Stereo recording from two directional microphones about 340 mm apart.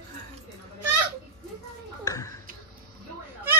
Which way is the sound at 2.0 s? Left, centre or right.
Centre.